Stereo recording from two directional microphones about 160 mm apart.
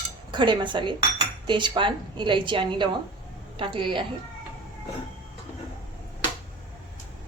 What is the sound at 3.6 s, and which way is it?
Speech, 30° right (ahead or behind).